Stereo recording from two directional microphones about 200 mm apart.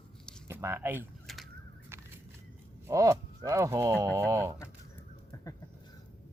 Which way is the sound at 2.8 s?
15° right (ahead or behind).